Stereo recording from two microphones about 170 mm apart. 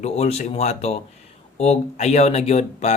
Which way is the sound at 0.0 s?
40° left (ahead or behind).